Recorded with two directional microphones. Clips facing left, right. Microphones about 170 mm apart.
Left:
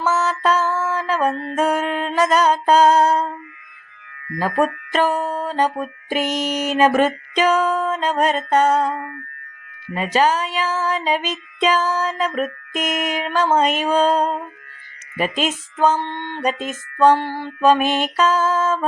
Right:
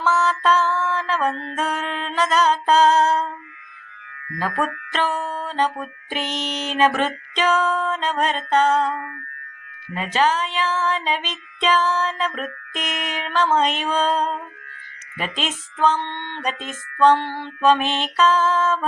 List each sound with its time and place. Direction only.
0.0 s mantra: 10° left (ahead or behind)
2.0 s music: 10° left (ahead or behind)
4.4 s music: 40° left (ahead or behind)
4.6 s music: 10° left (ahead or behind)
12.4 s mantra: 10° left (ahead or behind)
13.3 s music: 10° left (ahead or behind)
16.0 s music: 40° left (ahead or behind)
16.4 s music: 10° left (ahead or behind)